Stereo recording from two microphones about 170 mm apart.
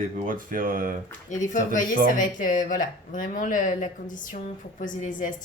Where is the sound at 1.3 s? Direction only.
45° left (ahead or behind).